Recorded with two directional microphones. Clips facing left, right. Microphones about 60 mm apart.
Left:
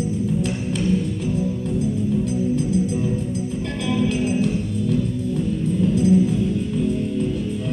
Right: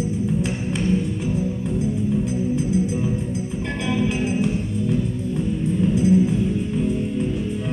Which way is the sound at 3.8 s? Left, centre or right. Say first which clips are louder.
Left 1 dB; right.